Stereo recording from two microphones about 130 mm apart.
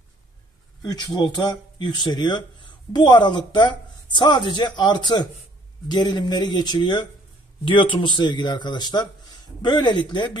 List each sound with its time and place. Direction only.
0.9 s speech: 35° left (ahead or behind)